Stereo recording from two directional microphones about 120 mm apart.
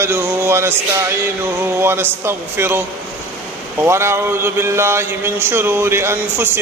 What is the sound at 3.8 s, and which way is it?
A man's voice, 20° right (ahead or behind).